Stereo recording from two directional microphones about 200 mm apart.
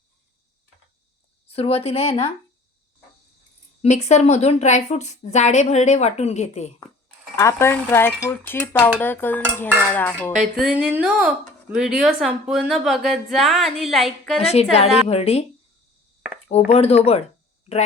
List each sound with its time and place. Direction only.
1.5 s speech: 30° left (ahead or behind)
3.8 s a woman's voice: 35° left (ahead or behind)
7.3 s speech: 15° left (ahead or behind)
10.3 s speech: centre (ahead or behind)
14.3 s a woman's voice: 30° left (ahead or behind)
16.5 s a woman's voice: 30° left (ahead or behind)